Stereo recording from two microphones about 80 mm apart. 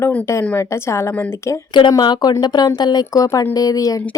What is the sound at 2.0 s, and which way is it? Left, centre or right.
Speech, left.